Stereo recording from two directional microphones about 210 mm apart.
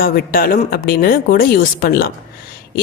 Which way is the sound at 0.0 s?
45° left (ahead or behind).